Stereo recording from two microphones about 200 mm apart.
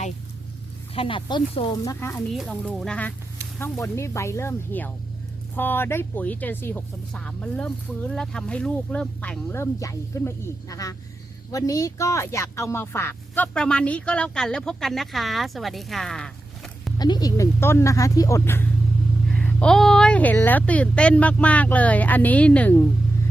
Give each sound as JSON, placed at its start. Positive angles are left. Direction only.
{"t": 0.9, "sound": "speech", "side_deg": 25}
{"t": 2.3, "sound": "speech", "side_deg": 0}
{"t": 17.0, "sound": "speech", "side_deg": 20}